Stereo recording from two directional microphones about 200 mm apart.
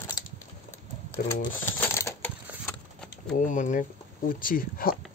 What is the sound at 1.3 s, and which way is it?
Typewriter, 10° left (ahead or behind).